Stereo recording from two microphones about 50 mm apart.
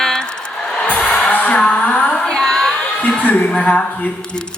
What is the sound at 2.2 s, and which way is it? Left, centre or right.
Music, centre.